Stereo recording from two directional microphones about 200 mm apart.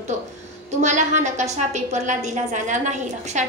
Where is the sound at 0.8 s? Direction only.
35° right (ahead or behind).